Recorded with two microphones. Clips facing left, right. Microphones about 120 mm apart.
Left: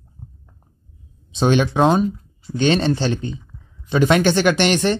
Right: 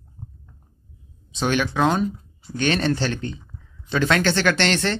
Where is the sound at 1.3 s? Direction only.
25° left (ahead or behind).